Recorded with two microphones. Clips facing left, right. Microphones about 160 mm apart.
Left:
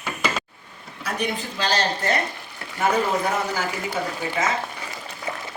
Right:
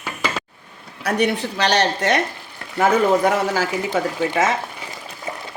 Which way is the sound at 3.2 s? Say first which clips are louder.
Right 6 dB; 90° right.